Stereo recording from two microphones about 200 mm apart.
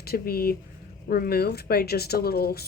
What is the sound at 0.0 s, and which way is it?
Speech, 50° left (ahead or behind).